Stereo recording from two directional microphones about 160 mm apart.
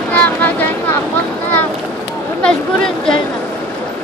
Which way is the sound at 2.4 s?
5° left (ahead or behind).